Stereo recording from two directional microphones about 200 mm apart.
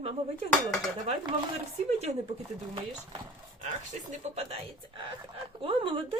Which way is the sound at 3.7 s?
35° right (ahead or behind).